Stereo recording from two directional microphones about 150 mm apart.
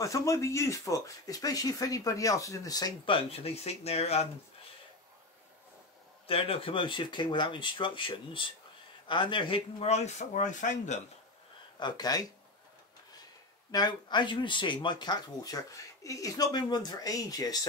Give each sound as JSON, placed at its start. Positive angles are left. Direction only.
{"t": 0.0, "sound": "speech", "side_deg": 20}
{"t": 6.2, "sound": "speech", "side_deg": 40}
{"t": 11.8, "sound": "speech", "side_deg": 25}
{"t": 13.7, "sound": "speech", "side_deg": 30}